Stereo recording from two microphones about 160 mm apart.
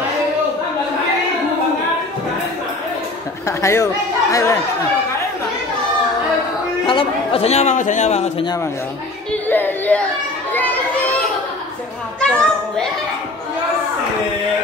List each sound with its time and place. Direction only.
3.4 s speech: 20° left (ahead or behind)
6.9 s speech: 35° left (ahead or behind)
9.3 s music: 10° left (ahead or behind)
10.5 s a sound: 10° left (ahead or behind)
12.2 s a child's voice: 5° left (ahead or behind)